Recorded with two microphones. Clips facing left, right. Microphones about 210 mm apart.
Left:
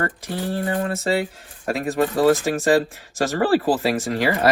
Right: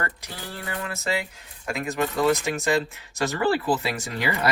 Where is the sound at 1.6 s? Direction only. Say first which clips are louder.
Left 5 dB; 35° left (ahead or behind).